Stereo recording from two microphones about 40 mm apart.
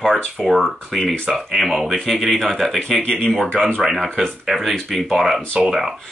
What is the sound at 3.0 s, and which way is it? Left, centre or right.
Speech, left.